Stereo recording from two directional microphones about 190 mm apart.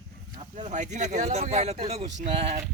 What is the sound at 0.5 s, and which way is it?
Speech, 40° right (ahead or behind).